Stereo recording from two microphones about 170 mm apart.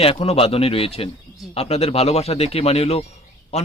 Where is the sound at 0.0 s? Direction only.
35° left (ahead or behind).